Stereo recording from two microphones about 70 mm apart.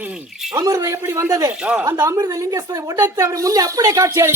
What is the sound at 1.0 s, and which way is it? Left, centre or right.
Speech, right.